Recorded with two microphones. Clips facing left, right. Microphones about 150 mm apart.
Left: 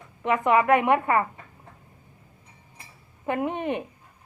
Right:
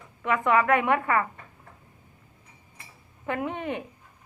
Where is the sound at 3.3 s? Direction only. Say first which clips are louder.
Left 3 dB; 20° left (ahead or behind).